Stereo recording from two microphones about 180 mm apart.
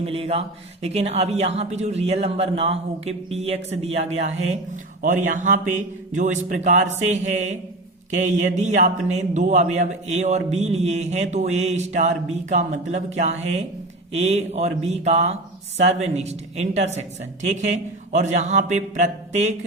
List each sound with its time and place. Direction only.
0.0 s a man's voice: 35° right (ahead or behind)